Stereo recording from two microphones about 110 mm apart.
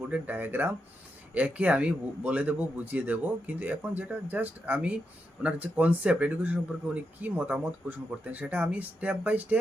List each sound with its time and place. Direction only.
0.1 s speech: 15° right (ahead or behind)